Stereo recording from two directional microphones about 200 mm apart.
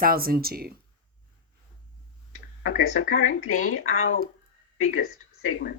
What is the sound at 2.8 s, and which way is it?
Speech, 90° left.